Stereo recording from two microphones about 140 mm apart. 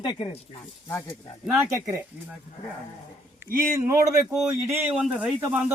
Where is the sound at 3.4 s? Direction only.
20° right (ahead or behind).